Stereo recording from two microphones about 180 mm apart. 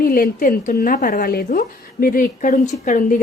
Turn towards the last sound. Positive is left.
turn(degrees=50)  # may be behind; listen again after turning